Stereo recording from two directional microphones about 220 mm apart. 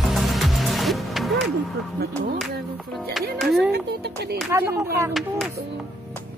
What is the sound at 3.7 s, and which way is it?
Music, 45° right (ahead or behind).